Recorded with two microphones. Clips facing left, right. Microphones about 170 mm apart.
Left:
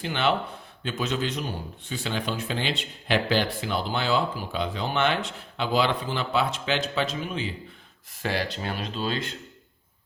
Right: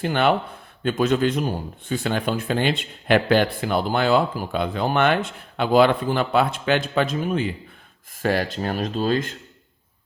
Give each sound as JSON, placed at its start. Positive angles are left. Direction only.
{"t": 0.0, "sound": "speech", "side_deg": -50}